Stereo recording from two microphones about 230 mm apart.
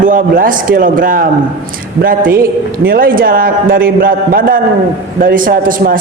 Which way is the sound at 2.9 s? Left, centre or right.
Right.